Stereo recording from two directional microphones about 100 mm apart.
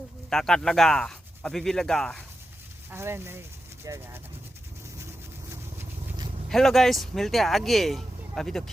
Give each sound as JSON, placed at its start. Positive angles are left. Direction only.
{"t": 0.3, "sound": "speech", "side_deg": 5}
{"t": 2.9, "sound": "speech", "side_deg": -25}
{"t": 6.5, "sound": "speech", "side_deg": 5}